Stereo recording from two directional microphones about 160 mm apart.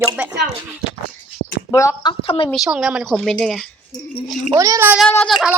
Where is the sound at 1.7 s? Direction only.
25° left (ahead or behind).